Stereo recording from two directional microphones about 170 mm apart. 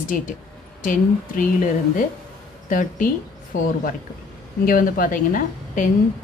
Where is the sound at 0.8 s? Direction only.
50° left (ahead or behind).